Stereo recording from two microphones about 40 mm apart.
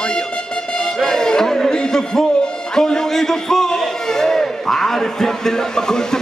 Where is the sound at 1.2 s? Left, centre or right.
Centre.